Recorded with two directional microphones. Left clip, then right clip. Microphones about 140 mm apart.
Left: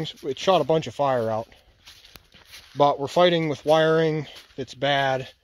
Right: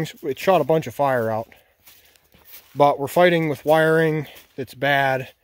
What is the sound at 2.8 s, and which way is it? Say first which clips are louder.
Speech: right 3 dB; 15° right (ahead or behind).